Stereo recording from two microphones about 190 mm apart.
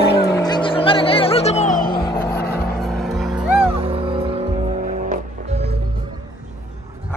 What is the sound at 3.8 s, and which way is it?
Music, 30° right (ahead or behind).